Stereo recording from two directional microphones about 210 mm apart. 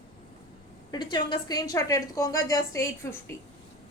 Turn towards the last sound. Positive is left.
turn(degrees=15)  # may be behind; listen again after turning